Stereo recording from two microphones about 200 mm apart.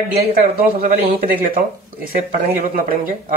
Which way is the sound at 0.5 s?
45° right (ahead or behind).